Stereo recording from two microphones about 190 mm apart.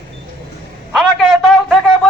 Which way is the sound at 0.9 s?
Centre (ahead or behind).